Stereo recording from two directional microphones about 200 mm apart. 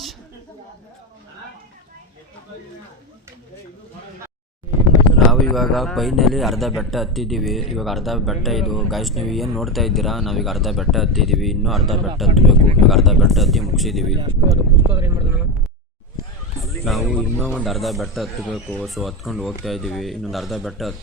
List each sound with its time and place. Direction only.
5.3 s a man's voice: centre (ahead or behind)
14.2 s speech: 20° right (ahead or behind)
16.6 s a man's voice: centre (ahead or behind)